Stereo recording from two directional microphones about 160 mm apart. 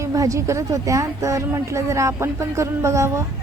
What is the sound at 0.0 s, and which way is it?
Speech, 20° right (ahead or behind).